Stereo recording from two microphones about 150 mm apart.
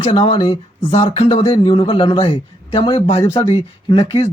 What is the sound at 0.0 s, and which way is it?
Speech, 40° left (ahead or behind).